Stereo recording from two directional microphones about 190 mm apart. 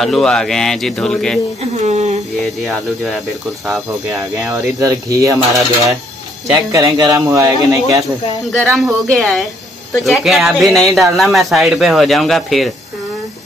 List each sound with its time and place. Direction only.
0.0 s speech: 5° left (ahead or behind)
1.9 s speech: 35° right (ahead or behind)
2.6 s speech: centre (ahead or behind)
4.5 s speech: 15° right (ahead or behind)
9.0 s speech: centre (ahead or behind)